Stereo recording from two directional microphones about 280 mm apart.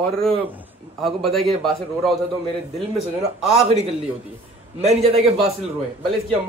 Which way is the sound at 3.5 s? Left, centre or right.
Right.